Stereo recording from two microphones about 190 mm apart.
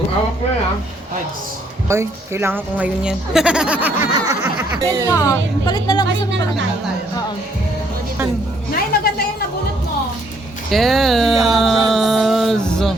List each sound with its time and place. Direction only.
1.9 s a woman's voice: 15° right (ahead or behind)
5.0 s a woman's voice: 15° left (ahead or behind)
8.7 s speech: 55° left (ahead or behind)
10.7 s speech: centre (ahead or behind)
11.9 s music: centre (ahead or behind)